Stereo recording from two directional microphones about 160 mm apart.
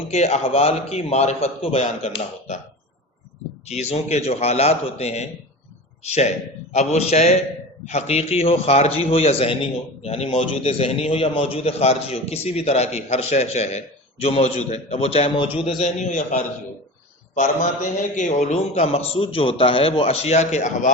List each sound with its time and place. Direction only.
0.1 s a man's voice: 40° left (ahead or behind)
3.7 s a man's voice: 45° left (ahead or behind)